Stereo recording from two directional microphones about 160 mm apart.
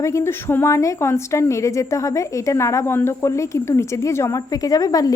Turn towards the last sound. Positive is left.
turn(degrees=20)  # may be behind; listen again after turning